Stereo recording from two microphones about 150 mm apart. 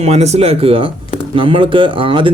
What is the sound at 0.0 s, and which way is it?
Speech, 45° right (ahead or behind).